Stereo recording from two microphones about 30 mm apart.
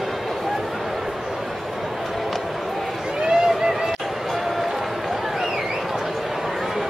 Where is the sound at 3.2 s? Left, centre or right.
Centre.